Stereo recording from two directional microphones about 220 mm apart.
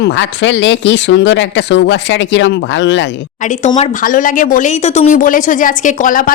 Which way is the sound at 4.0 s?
35° left (ahead or behind).